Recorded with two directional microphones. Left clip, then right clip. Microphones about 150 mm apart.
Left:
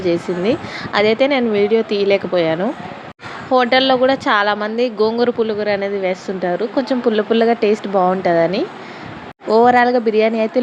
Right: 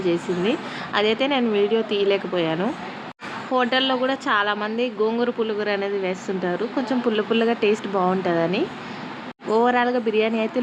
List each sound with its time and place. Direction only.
0.0 s speech: 20° left (ahead or behind)